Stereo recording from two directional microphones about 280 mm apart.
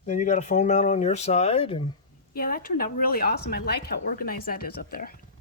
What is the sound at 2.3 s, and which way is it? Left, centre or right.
Speech, left.